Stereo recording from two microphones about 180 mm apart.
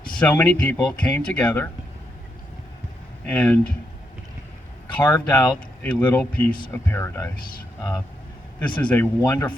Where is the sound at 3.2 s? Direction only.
10° left (ahead or behind).